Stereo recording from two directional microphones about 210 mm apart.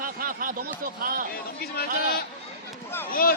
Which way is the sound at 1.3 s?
45° left (ahead or behind).